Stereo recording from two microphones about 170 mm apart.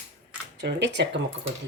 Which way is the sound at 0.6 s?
90° right.